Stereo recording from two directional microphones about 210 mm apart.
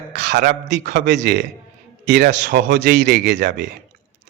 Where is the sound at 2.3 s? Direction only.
40° right (ahead or behind).